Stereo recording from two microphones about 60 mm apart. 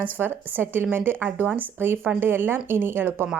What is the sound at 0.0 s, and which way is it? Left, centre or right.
Speech, right.